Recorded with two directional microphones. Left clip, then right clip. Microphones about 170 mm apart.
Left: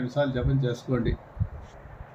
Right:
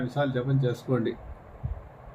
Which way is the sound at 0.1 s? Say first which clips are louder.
Left 2 dB; 5° right (ahead or behind).